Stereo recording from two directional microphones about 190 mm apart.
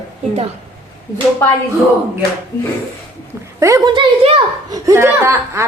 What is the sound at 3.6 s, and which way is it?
Speech, 20° right (ahead or behind).